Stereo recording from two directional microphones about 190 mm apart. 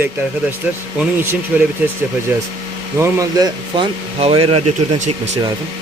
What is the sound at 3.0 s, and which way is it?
Speech, 20° right (ahead or behind).